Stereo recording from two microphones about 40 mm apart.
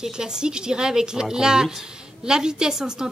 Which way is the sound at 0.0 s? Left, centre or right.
Centre.